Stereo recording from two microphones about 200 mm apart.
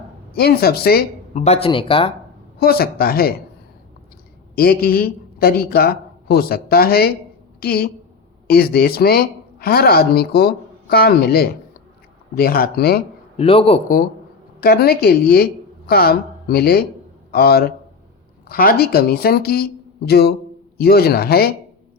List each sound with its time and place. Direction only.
0.3 s speech: 50° left (ahead or behind)
1.3 s speech: 35° left (ahead or behind)
2.6 s speech: 50° left (ahead or behind)
4.5 s speech: 50° left (ahead or behind)
13.3 s speech: 30° left (ahead or behind)
14.6 s speech: 50° left (ahead or behind)